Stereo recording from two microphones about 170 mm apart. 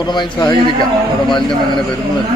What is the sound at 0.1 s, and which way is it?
Speech, 25° left (ahead or behind).